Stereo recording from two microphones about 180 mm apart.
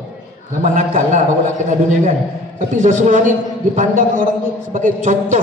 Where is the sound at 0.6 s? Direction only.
45° right (ahead or behind).